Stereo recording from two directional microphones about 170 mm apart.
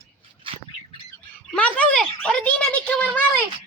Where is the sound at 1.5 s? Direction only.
5° left (ahead or behind).